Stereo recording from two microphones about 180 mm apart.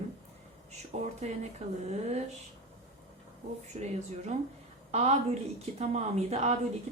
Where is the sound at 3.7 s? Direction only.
40° right (ahead or behind).